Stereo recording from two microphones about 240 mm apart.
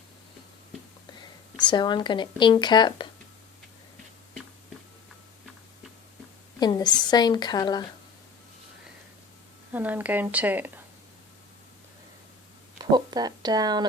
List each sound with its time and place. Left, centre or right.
1.7 s speech: centre
6.6 s a woman's voice: centre
9.7 s speech: centre
12.8 s speech: centre